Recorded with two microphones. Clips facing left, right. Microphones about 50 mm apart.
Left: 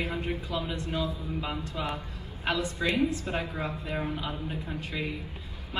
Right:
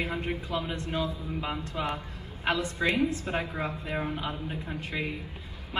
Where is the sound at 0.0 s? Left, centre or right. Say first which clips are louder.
Even; right.